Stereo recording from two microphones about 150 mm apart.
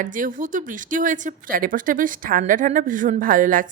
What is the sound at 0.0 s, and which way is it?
Speech, 60° right (ahead or behind).